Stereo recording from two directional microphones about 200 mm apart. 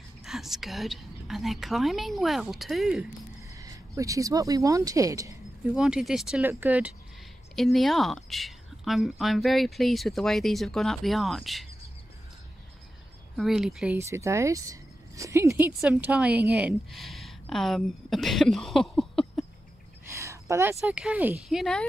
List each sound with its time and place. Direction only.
0.2 s speech: centre (ahead or behind)
3.4 s speech: 15° right (ahead or behind)
5.8 s speech: centre (ahead or behind)
13.4 s speech: centre (ahead or behind)
13.9 s speech: 15° right (ahead or behind); by 19.4 s 5° left (ahead or behind)
20.1 s a sound: 15° right (ahead or behind)
20.8 s speech: 5° right (ahead or behind)